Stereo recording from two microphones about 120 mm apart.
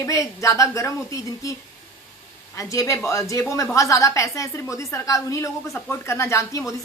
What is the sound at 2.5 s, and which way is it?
A woman's voice, 25° left (ahead or behind).